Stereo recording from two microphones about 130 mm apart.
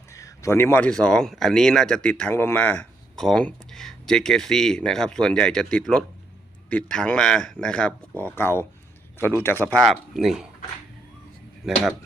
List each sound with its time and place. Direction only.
0.1 s a sound: 25° left (ahead or behind)
0.9 s a man's voice: 5° left (ahead or behind)
8.2 s a man's voice: 20° left (ahead or behind)
9.8 s speech: centre (ahead or behind)